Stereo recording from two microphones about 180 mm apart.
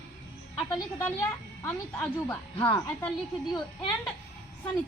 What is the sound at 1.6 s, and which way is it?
A woman's voice, 10° left (ahead or behind).